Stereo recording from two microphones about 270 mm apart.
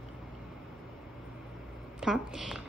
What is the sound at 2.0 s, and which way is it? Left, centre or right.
Speech, centre.